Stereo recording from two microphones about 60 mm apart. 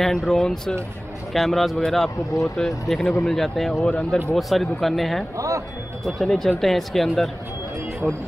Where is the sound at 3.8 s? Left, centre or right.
Centre.